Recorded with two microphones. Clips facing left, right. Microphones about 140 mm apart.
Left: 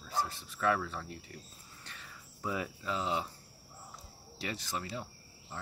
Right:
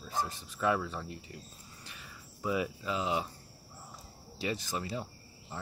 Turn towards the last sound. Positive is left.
turn(degrees=-20)  # may be behind; listen again after turning